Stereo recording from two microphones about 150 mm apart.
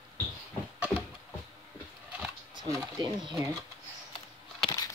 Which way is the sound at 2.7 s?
20° right (ahead or behind).